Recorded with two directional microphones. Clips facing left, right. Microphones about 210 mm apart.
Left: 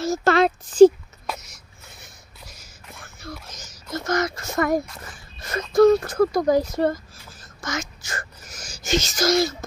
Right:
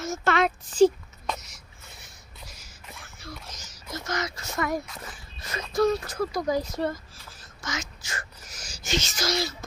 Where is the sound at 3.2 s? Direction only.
50° left (ahead or behind).